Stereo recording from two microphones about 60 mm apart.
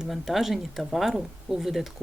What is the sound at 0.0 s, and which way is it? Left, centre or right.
Speech, centre.